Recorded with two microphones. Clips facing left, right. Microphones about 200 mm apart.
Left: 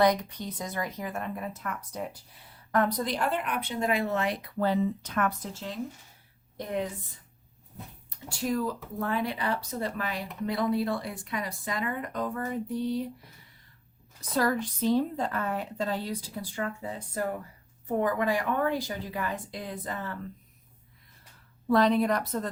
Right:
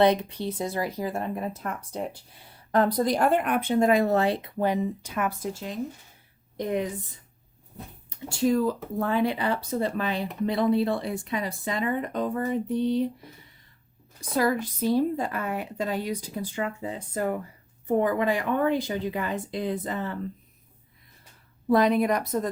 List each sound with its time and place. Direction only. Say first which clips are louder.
0.0 s speech: right 3 dB; 25° right (ahead or behind)
8.3 s speech: right 6 dB; 25° right (ahead or behind)
14.2 s speech: right 2 dB; 10° right (ahead or behind)
21.7 s speech: right 2 dB; 10° right (ahead or behind)